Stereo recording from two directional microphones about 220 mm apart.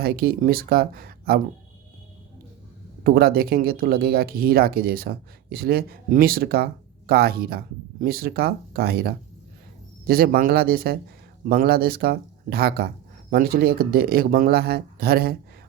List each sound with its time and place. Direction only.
0.0 s speech: 45° right (ahead or behind)
3.0 s speech: 45° right (ahead or behind)